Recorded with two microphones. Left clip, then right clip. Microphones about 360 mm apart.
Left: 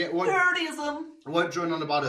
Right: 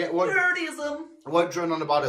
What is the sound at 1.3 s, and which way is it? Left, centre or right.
Speech, centre.